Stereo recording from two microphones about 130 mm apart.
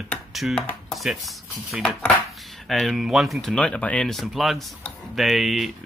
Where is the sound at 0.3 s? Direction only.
Centre (ahead or behind).